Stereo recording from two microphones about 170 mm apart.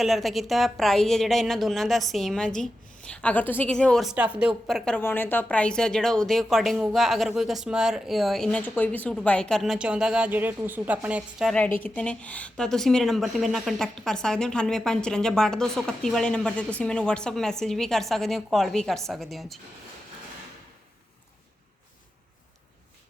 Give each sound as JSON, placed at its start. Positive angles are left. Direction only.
{"t": 0.0, "sound": "a woman's voice", "side_deg": 0}
{"t": 11.5, "sound": "a woman's voice", "side_deg": 10}